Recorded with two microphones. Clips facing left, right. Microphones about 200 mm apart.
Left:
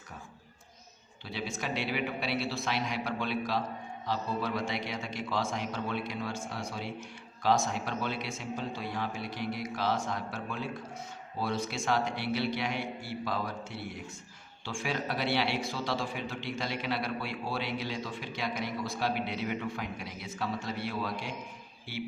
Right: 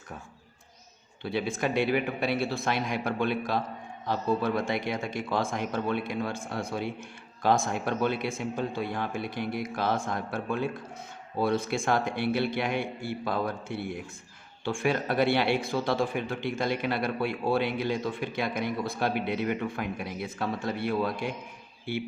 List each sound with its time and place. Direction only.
1.2 s speech: 55° right (ahead or behind)